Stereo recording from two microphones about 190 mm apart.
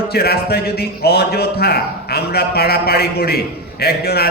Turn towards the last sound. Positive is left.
turn(degrees=55)  # may be behind; listen again after turning